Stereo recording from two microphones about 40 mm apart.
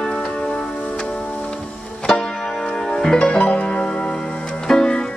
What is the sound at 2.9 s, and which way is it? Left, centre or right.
Music, centre.